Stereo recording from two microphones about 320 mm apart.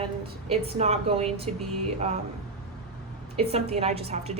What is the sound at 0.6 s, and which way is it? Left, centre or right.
Speech, centre.